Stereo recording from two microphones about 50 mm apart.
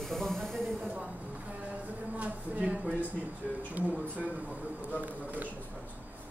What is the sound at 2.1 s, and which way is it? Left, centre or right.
Speech, right.